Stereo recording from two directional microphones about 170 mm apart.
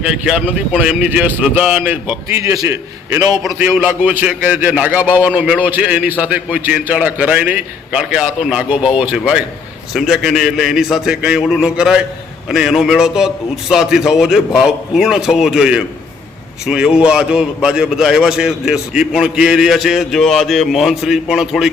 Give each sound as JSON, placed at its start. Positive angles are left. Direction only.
{"t": 0.1, "sound": "a man's voice", "side_deg": -5}